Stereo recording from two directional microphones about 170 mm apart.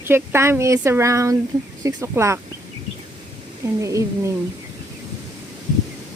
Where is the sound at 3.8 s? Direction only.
20° right (ahead or behind).